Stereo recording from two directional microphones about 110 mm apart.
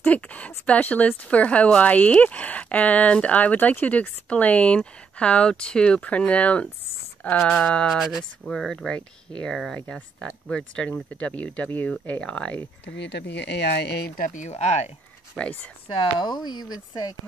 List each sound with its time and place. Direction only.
0.0 s speech: 15° left (ahead or behind)
14.4 s speech: 90° left
15.3 s speech: 10° left (ahead or behind)
15.9 s speech: 45° left (ahead or behind)